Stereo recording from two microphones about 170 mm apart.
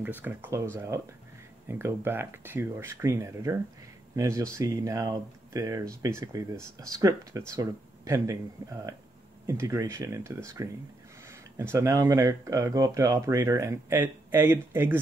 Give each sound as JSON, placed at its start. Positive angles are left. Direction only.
{"t": 0.0, "sound": "speech", "side_deg": -10}